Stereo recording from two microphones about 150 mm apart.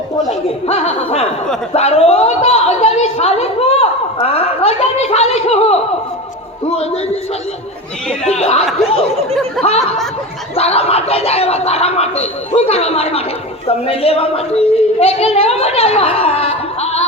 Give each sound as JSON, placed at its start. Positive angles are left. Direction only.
{"t": 0.7, "sound": "a woman's voice", "side_deg": 45}
{"t": 8.3, "sound": "a woman's voice", "side_deg": 45}